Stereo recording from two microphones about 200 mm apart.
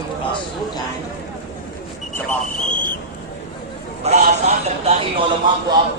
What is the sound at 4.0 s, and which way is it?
Speech, 35° right (ahead or behind).